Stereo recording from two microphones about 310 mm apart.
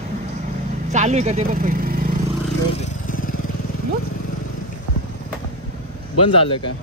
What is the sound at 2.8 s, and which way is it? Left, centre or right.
Vehicle, left.